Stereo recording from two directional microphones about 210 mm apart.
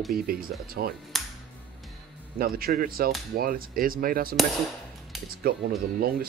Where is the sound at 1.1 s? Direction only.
Centre (ahead or behind).